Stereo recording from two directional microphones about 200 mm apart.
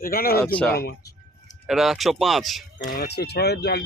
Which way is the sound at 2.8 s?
50° left (ahead or behind).